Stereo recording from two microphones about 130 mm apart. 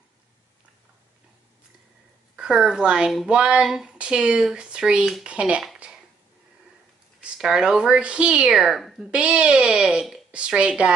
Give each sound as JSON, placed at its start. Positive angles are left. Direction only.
{"t": 2.3, "sound": "speech", "side_deg": -5}
{"t": 7.2, "sound": "speech", "side_deg": -5}